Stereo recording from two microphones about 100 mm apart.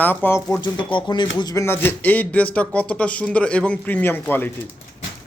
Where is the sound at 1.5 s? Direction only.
25° left (ahead or behind).